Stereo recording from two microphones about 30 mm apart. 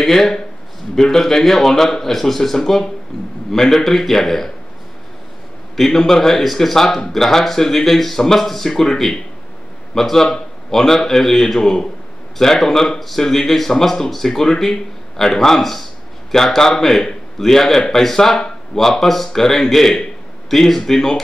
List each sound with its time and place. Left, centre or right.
0.0 s speech: centre
5.8 s speech: centre